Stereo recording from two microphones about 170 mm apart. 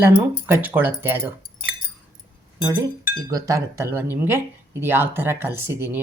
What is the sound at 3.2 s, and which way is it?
Speech, 20° right (ahead or behind).